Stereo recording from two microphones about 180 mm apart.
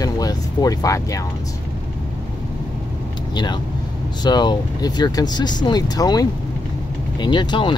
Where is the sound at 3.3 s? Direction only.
25° left (ahead or behind).